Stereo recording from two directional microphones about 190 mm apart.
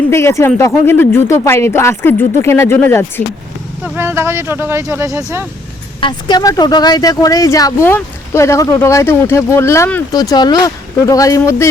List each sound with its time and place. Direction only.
0.1 s speech: 15° left (ahead or behind)
3.9 s speech: 10° right (ahead or behind)
6.0 s speech: 25° left (ahead or behind)